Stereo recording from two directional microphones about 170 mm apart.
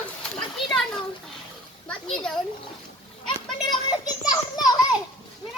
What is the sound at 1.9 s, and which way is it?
Speech, 5° left (ahead or behind).